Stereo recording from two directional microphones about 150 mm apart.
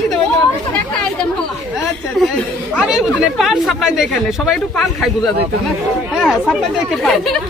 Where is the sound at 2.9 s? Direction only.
5° right (ahead or behind).